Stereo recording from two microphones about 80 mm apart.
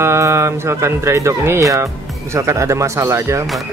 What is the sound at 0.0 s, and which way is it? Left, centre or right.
Speech, right.